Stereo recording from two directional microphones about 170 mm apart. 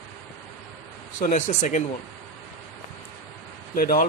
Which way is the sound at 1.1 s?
45° left (ahead or behind).